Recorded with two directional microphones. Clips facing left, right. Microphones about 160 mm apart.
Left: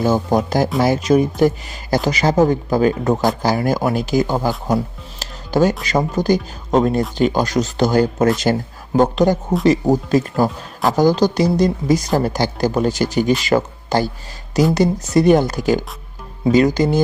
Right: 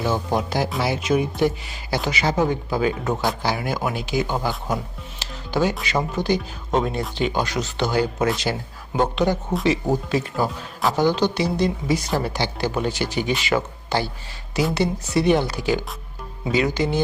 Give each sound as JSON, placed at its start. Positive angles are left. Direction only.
{"t": 0.0, "sound": "speech", "side_deg": 40}
{"t": 5.2, "sound": "music", "side_deg": 45}
{"t": 5.8, "sound": "speech", "side_deg": 40}